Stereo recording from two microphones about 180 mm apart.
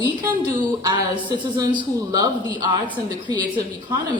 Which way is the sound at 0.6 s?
25° right (ahead or behind).